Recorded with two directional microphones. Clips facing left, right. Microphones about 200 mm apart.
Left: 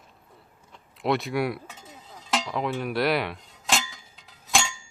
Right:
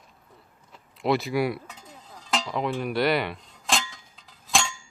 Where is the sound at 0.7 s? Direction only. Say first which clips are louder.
Right 1 dB; centre (ahead or behind).